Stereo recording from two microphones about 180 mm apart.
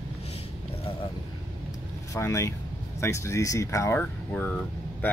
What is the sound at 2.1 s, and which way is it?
Speech, 15° left (ahead or behind).